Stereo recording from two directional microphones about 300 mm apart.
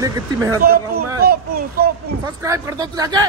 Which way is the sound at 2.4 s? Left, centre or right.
Centre.